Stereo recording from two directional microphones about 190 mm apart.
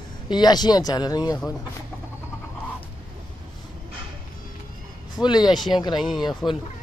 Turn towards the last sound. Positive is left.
turn(degrees=0)  # may be behind; listen again after turning